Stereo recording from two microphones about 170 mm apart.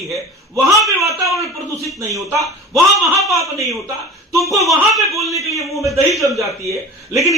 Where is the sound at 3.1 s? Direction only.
Centre (ahead or behind).